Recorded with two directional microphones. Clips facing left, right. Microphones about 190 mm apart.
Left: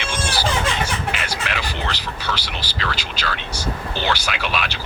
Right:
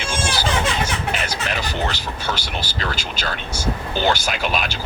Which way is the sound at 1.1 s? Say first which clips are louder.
Right 2 dB; 45° right (ahead or behind).